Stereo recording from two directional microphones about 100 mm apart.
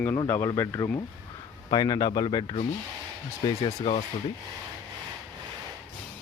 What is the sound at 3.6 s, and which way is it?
Speech, 85° left.